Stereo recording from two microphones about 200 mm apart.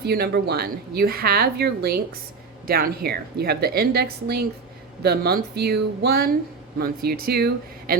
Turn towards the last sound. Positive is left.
turn(degrees=-50)  # may be behind; listen again after turning